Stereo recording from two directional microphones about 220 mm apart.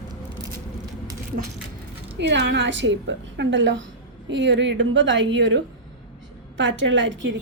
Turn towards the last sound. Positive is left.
turn(degrees=-55)  # may be behind; listen again after turning